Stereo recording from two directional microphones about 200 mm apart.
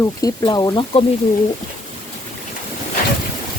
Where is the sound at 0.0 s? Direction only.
15° left (ahead or behind).